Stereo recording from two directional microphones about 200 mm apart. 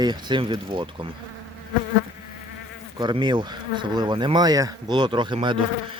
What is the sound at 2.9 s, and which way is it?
Speech, 25° right (ahead or behind).